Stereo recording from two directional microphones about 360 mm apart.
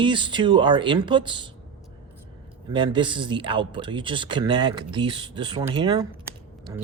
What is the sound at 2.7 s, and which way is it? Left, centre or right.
Speech, centre.